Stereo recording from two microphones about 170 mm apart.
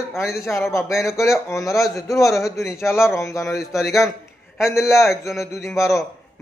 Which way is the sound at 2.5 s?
15° left (ahead or behind).